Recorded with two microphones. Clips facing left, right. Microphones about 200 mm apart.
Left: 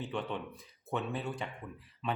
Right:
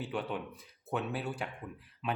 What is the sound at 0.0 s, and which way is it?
Speech, 5° right (ahead or behind).